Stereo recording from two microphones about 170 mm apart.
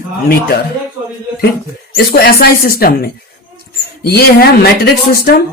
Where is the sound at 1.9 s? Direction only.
65° left (ahead or behind).